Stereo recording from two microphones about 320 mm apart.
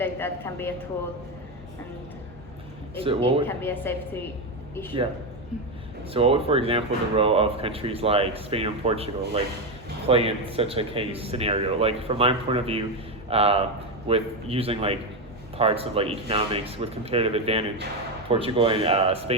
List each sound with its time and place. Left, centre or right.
0.0 s a woman's voice: centre
2.9 s speech: centre
3.4 s a woman's voice: centre
6.1 s speech: centre